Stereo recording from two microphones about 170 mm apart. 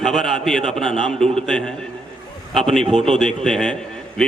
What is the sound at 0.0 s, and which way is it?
Speech, centre (ahead or behind).